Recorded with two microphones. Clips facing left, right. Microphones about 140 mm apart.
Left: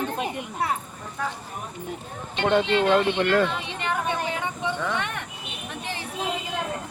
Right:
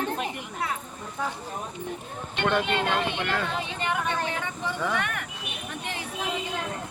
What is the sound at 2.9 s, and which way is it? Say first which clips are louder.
Speech: left 7 dB; 55° left (ahead or behind).